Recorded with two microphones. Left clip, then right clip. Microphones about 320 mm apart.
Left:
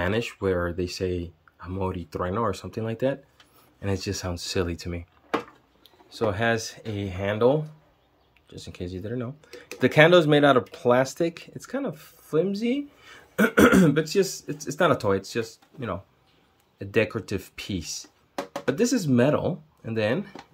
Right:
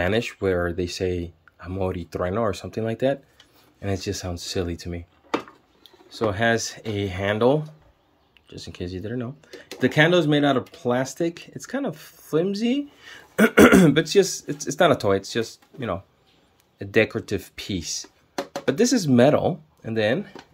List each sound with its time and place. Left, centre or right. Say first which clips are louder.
0.0 s speech: right 3 dB; centre
6.0 s speech: right 3 dB; centre